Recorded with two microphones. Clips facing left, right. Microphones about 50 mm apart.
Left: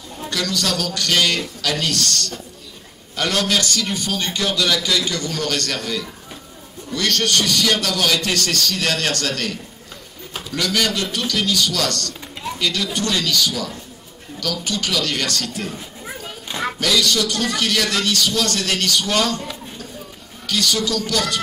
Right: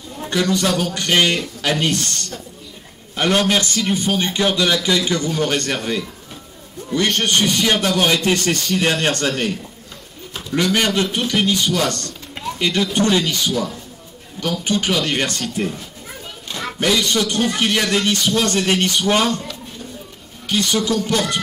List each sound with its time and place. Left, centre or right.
0.2 s a man's voice: right
16.4 s a sound: centre
16.8 s a man's voice: right
20.4 s a man's voice: right